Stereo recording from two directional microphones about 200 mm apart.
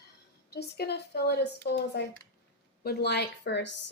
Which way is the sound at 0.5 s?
55° left (ahead or behind).